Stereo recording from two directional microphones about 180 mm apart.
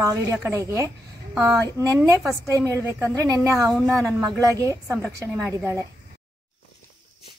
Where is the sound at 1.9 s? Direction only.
15° right (ahead or behind).